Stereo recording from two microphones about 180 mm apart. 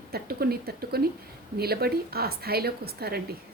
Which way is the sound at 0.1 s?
60° right (ahead or behind).